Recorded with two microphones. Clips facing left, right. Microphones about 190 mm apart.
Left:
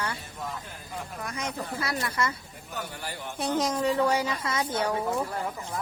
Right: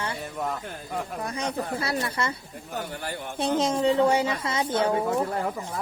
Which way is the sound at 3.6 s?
25° right (ahead or behind).